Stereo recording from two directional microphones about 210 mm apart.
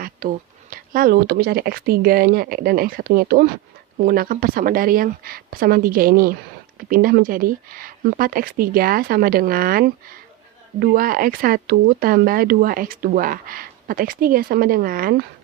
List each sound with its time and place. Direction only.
0.0 s speech: 40° right (ahead or behind)